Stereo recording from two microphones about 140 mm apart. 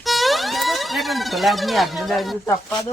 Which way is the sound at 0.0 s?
Centre (ahead or behind).